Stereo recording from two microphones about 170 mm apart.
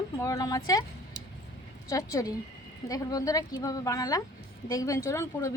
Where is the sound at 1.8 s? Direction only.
20° left (ahead or behind).